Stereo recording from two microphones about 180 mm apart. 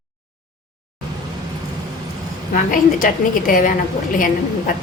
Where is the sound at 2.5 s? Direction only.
50° left (ahead or behind).